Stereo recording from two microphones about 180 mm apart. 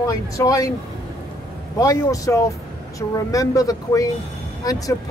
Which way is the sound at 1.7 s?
20° left (ahead or behind).